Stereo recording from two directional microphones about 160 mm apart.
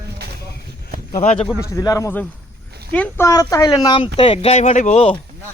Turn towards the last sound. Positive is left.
turn(degrees=40)  # may be behind; listen again after turning